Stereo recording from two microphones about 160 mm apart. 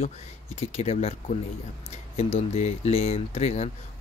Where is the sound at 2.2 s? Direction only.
40° left (ahead or behind).